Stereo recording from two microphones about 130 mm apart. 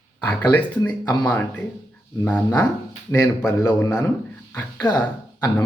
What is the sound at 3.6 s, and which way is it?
Speech, 25° left (ahead or behind).